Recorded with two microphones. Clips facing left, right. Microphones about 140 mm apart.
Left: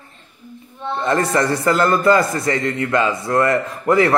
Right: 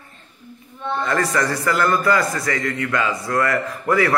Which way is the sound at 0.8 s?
25° left (ahead or behind).